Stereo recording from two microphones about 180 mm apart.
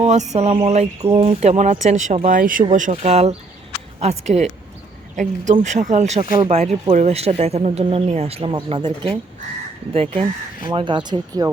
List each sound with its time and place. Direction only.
0.0 s speech: 40° right (ahead or behind)